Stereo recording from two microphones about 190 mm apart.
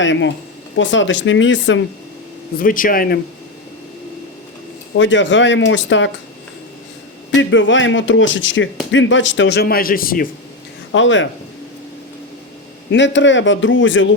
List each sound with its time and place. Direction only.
0.0 s speech: 75° left (ahead or behind)
2.6 s speech: 45° left (ahead or behind)
4.9 s speech: 75° left (ahead or behind)
7.3 s speech: 80° left; by 10.2 s 50° left (ahead or behind)
10.9 s speech: 80° left
12.9 s speech: 70° left (ahead or behind)